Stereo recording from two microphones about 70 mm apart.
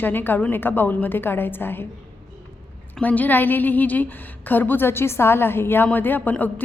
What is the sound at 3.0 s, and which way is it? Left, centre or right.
A woman's voice, left.